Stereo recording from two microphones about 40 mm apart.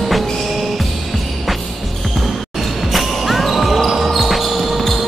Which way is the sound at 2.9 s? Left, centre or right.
Centre.